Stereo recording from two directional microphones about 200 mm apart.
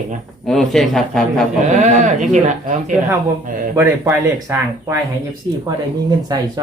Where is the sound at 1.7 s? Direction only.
35° right (ahead or behind).